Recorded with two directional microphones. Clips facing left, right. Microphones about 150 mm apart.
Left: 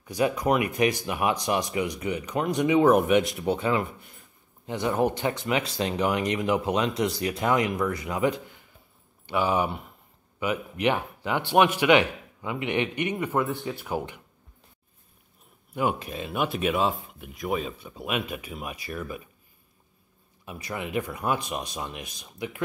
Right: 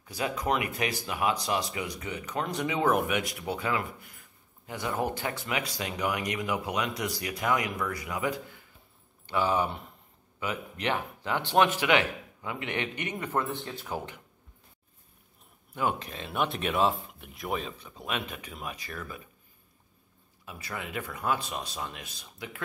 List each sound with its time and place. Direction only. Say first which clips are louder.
0.0 s speech: left 7 dB; 20° left (ahead or behind)
15.7 s speech: left 3 dB; 10° left (ahead or behind)
20.4 s speech: left 5 dB; 20° left (ahead or behind)